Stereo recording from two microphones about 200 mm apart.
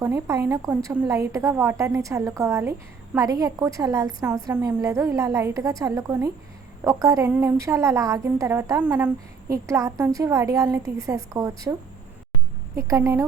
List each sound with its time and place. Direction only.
0.0 s a woman's voice: 15° right (ahead or behind)
12.9 s a woman's voice: 15° right (ahead or behind)